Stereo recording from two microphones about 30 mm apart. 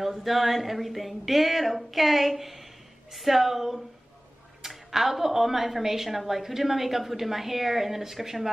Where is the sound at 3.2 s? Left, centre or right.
Centre.